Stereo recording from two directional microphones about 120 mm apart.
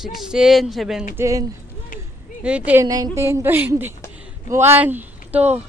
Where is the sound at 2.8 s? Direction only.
30° right (ahead or behind); by 5.6 s 15° right (ahead or behind).